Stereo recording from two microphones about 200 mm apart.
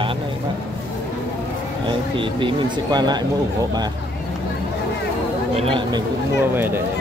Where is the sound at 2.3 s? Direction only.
25° right (ahead or behind).